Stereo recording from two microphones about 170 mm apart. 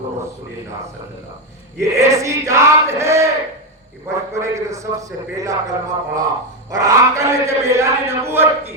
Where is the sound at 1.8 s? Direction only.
20° right (ahead or behind).